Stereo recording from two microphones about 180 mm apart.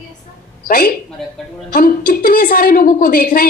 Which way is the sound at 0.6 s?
50° left (ahead or behind).